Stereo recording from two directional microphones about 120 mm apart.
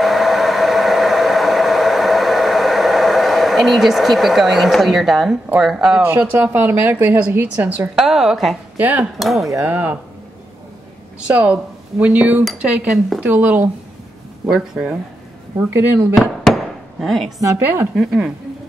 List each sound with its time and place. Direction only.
0.0 s vehicle: centre (ahead or behind)
5.6 s speech: 5° right (ahead or behind)
6.0 s a woman's voice: 15° right (ahead or behind)
8.7 s speech: 15° right (ahead or behind)
9.2 s speech: centre (ahead or behind)
9.7 s a woman's voice: 15° right (ahead or behind)
11.2 s a woman's voice: 10° right (ahead or behind)
15.5 s speech: 20° right (ahead or behind)
17.0 s speech: centre (ahead or behind)
17.4 s speech: 20° right (ahead or behind)
17.9 s speech: centre (ahead or behind)